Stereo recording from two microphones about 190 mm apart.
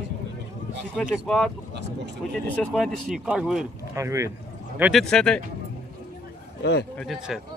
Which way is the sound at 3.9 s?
15° right (ahead or behind).